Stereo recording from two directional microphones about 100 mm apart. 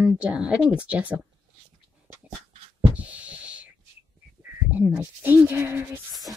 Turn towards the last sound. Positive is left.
turn(degrees=-20)  # may be behind; listen again after turning